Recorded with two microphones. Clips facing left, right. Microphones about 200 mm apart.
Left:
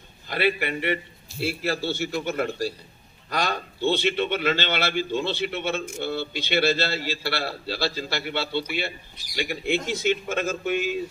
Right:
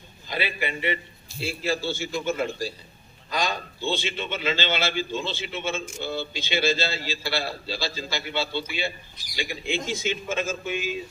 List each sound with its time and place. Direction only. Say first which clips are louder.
0.3 s a man's voice: left 5 dB; 65° left (ahead or behind)